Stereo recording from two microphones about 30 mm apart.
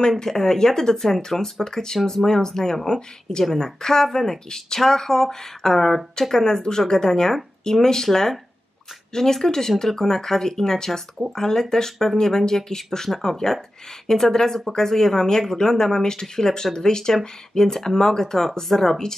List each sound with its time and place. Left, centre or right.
0.2 s speech: centre